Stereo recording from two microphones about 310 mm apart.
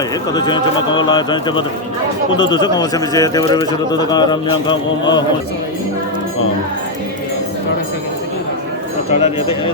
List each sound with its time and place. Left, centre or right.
0.3 s speech: centre
9.0 s speech: centre